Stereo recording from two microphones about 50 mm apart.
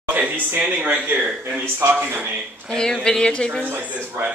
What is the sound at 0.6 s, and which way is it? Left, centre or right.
Speech, right.